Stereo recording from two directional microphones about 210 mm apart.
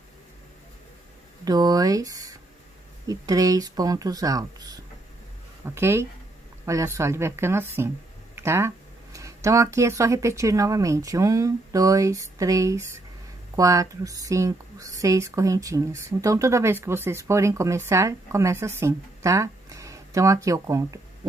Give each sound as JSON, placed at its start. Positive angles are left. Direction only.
{"t": 1.4, "sound": "speech", "side_deg": -20}